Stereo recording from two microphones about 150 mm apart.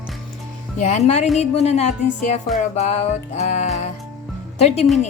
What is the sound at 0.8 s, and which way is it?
Speech, 50° left (ahead or behind).